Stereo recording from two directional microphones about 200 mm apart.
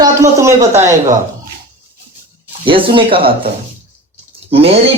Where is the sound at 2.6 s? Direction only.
25° right (ahead or behind).